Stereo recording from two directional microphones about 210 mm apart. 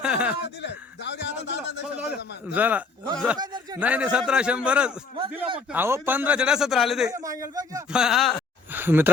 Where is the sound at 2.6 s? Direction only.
10° right (ahead or behind).